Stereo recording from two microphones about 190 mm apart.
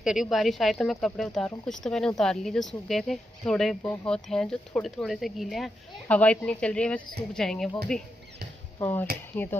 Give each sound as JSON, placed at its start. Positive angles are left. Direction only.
{"t": 0.0, "sound": "speech", "side_deg": -5}